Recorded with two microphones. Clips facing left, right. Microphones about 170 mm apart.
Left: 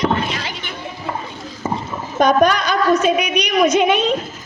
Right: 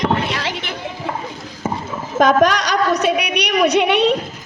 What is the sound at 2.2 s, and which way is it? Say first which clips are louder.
A woman's voice: even; 90° right.